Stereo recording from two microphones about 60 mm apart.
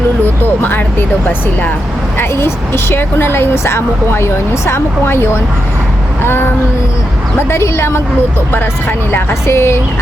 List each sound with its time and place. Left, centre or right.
0.4 s speech: left
2.1 s a woman's voice: left
9.1 s a woman's voice: left